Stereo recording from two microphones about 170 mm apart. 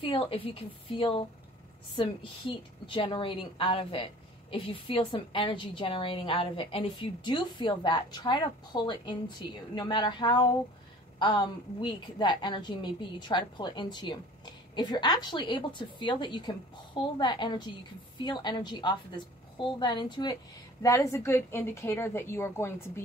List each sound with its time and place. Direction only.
0.0 s a woman's voice: 30° left (ahead or behind); by 23.0 s 15° left (ahead or behind)